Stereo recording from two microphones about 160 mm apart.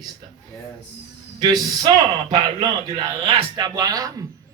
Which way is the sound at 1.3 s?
25° right (ahead or behind).